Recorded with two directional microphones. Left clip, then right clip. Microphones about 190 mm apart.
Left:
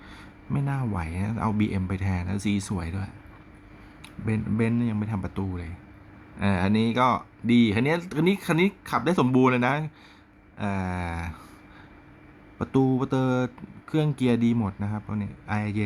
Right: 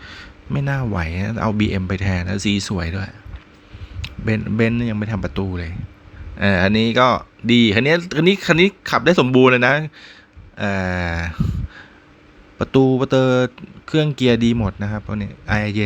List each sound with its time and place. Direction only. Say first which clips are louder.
0.0 s speech: right 9 dB; 15° right (ahead or behind)
10.6 s a sound: right 9 dB; 20° right (ahead or behind)
12.5 s speech: right 9 dB; 15° right (ahead or behind)